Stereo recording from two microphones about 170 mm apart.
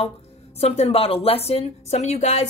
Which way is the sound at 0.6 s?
40° left (ahead or behind).